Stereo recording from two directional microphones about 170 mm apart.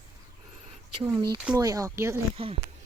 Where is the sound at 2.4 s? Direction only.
35° right (ahead or behind).